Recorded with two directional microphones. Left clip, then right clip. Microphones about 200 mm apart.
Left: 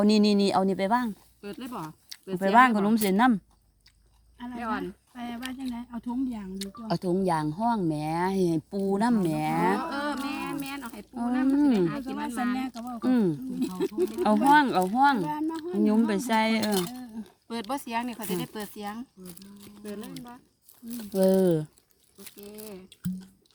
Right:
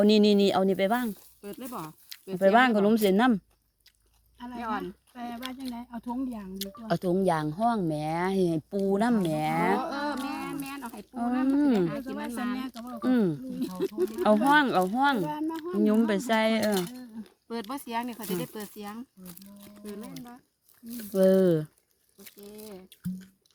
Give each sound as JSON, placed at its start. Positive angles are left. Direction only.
{"t": 0.0, "sound": "speech", "side_deg": -15}
{"t": 1.4, "sound": "speech", "side_deg": 35}
{"t": 2.4, "sound": "speech", "side_deg": -15}
{"t": 4.4, "sound": "speech", "side_deg": 0}
{"t": 4.6, "sound": "speech", "side_deg": 35}
{"t": 5.1, "sound": "speech", "side_deg": 0}
{"t": 6.6, "sound": "speech", "side_deg": -20}
{"t": 9.7, "sound": "a sound", "side_deg": 35}
{"t": 11.1, "sound": "speech", "side_deg": -15}
{"t": 12.3, "sound": "speech", "side_deg": 35}
{"t": 12.5, "sound": "speech", "side_deg": -5}
{"t": 17.5, "sound": "speech", "side_deg": 40}
{"t": 19.4, "sound": "speech", "side_deg": 0}